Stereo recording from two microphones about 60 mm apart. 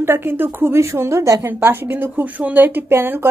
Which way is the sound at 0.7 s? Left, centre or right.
Right.